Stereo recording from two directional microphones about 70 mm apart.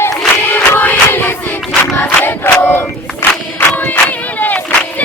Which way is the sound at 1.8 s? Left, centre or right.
Left.